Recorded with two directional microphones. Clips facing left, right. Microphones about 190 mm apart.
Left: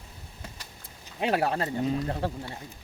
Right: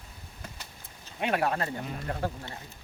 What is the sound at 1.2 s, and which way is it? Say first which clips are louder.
Speech: left 2 dB; 30° left (ahead or behind).